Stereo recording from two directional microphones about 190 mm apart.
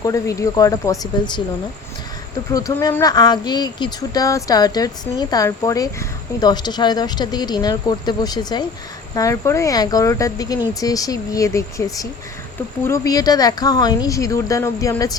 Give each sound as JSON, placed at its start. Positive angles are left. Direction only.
{"t": 0.0, "sound": "speech", "side_deg": 15}
{"t": 2.5, "sound": "speech", "side_deg": 20}